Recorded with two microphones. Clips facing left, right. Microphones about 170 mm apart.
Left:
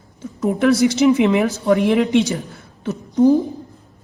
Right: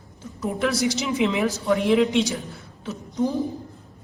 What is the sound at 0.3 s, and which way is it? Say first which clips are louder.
A woman's voice: left 8 dB; 55° left (ahead or behind).